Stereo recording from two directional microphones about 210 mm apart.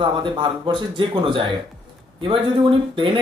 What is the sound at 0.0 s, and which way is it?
Speech, 25° right (ahead or behind).